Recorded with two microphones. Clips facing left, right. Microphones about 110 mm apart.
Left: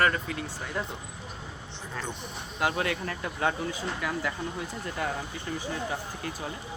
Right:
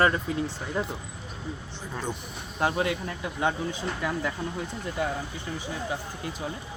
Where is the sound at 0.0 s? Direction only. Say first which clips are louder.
Right 3 dB; 25° right (ahead or behind).